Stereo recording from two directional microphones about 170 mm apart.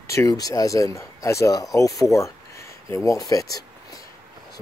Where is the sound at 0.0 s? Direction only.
15° left (ahead or behind).